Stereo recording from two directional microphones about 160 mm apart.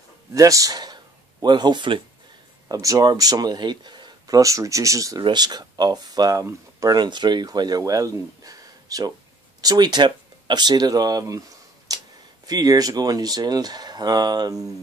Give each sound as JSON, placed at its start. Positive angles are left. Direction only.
{"t": 0.3, "sound": "speech", "side_deg": -20}